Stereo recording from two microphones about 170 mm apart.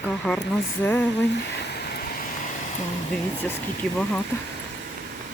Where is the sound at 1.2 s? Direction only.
90° left; by 2.5 s 55° left (ahead or behind).